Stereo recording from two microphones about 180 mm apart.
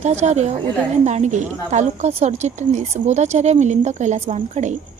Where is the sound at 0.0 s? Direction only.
40° right (ahead or behind).